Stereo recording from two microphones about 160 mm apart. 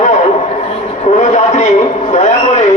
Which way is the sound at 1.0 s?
45° left (ahead or behind).